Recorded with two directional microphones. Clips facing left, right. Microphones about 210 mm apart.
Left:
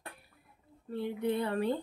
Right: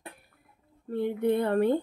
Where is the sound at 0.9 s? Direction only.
55° right (ahead or behind).